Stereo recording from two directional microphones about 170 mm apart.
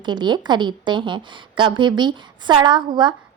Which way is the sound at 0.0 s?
25° right (ahead or behind).